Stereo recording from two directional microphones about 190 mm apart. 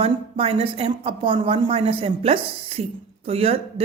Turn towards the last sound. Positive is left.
turn(degrees=-30)  # may be behind; listen again after turning